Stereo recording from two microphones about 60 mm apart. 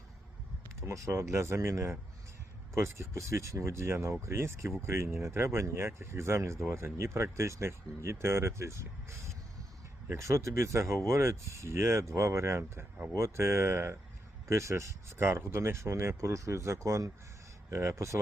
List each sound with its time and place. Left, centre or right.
0.8 s speech: right